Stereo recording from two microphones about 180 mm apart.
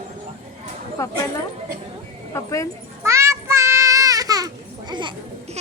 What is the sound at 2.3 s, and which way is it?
Speech, 15° left (ahead or behind).